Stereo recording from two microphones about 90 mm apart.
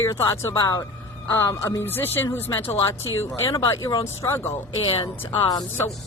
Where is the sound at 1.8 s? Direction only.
25° left (ahead or behind).